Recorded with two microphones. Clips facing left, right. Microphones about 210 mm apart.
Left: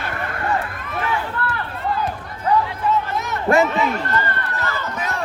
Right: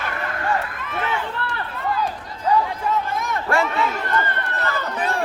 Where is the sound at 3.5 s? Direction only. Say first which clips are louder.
Left 5 dB; 20° left (ahead or behind).